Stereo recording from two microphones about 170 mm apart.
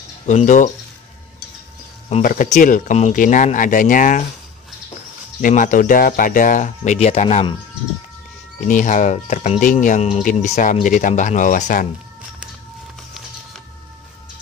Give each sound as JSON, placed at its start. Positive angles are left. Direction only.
{"t": 0.3, "sound": "speech", "side_deg": 45}
{"t": 2.2, "sound": "speech", "side_deg": 50}
{"t": 5.4, "sound": "speech", "side_deg": 50}
{"t": 8.6, "sound": "speech", "side_deg": 45}